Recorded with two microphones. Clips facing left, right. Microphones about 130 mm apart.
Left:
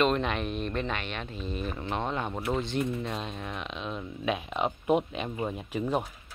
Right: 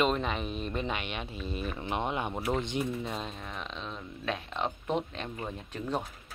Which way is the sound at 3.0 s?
Centre (ahead or behind).